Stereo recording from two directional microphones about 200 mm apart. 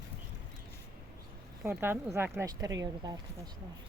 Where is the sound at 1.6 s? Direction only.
10° right (ahead or behind).